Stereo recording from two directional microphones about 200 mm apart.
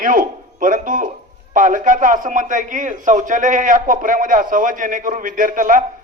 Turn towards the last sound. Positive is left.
turn(degrees=-40)  # may be behind; listen again after turning